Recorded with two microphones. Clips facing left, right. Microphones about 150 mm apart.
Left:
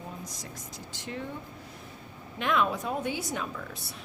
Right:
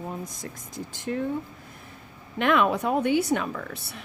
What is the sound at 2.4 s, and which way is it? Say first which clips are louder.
Speech: right 6 dB; 65° right (ahead or behind).